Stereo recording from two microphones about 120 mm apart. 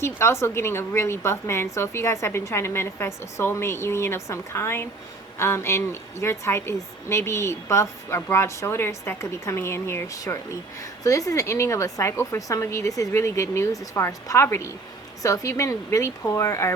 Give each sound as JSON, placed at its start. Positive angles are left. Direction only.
{"t": 0.0, "sound": "a woman's voice", "side_deg": 20}